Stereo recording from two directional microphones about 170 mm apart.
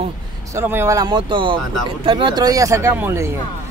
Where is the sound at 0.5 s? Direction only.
15° right (ahead or behind).